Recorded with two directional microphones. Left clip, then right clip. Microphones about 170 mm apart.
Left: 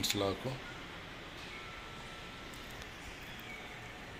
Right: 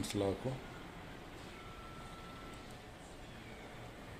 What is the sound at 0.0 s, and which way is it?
Speech, 20° right (ahead or behind).